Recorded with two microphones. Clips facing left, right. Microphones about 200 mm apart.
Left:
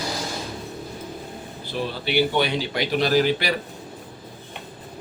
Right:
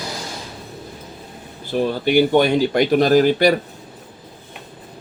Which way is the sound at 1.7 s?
50° right (ahead or behind).